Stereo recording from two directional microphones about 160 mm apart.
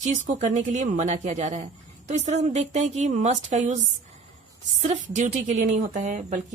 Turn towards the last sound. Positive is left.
turn(degrees=-50)  # may be behind; listen again after turning